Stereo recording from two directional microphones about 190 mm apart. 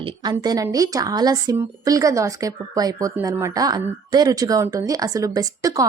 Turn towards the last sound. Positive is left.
turn(degrees=-20)  # may be behind; listen again after turning